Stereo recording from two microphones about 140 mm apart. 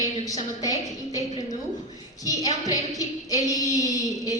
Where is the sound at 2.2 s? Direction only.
25° left (ahead or behind).